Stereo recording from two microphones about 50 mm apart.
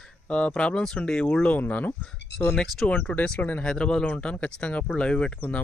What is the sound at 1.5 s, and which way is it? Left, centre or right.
Speech, left.